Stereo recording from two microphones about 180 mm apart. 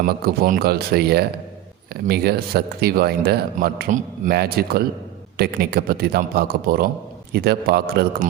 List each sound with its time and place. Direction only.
0.0 s speech: 55° right (ahead or behind)